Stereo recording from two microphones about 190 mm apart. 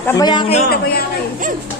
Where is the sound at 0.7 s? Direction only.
55° left (ahead or behind).